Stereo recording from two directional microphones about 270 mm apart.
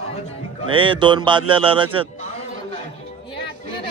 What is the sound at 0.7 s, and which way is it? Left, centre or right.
A man's voice, centre.